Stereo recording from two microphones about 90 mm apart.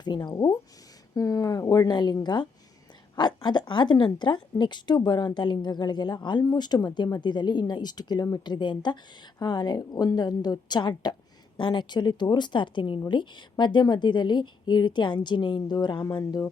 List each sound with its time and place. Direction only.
0.0 s speech: 55° left (ahead or behind)
1.1 s a woman's voice: 40° left (ahead or behind)
8.5 s a woman's voice: 60° left (ahead or behind)